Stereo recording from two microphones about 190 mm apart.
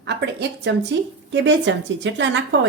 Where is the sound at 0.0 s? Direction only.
65° right (ahead or behind).